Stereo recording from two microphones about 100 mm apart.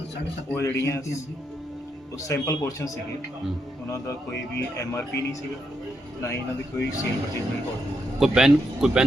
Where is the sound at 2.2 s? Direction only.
30° left (ahead or behind).